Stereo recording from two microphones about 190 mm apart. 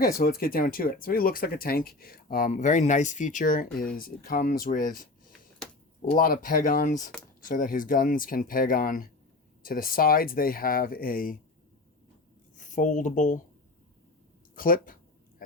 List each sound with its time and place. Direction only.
0.0 s speech: 50° left (ahead or behind)
6.1 s speech: 50° left (ahead or behind)
12.5 s speech: 40° left (ahead or behind)
14.5 s speech: 45° left (ahead or behind)